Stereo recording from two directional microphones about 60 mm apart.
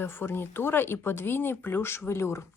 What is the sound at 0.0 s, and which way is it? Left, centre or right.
Speech, left.